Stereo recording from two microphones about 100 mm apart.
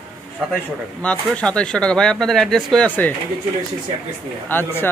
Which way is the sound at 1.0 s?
10° left (ahead or behind).